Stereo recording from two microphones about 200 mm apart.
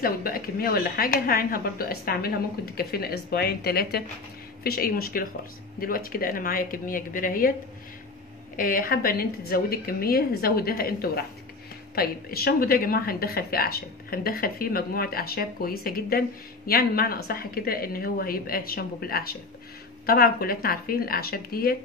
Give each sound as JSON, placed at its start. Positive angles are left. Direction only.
{"t": 0.0, "sound": "speech", "side_deg": 50}
{"t": 8.5, "sound": "speech", "side_deg": 45}